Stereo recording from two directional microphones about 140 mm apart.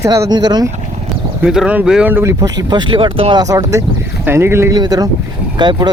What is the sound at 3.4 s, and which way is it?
Speech, 25° right (ahead or behind).